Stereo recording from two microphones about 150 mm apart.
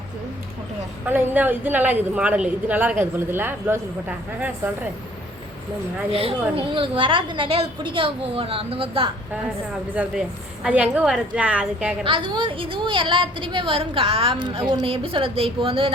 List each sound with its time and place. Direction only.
1.0 s a woman's voice: 10° right (ahead or behind)
6.1 s a woman's voice: 40° right (ahead or behind)
9.9 s a woman's voice: 5° right (ahead or behind)
12.0 s a woman's voice: 35° right (ahead or behind)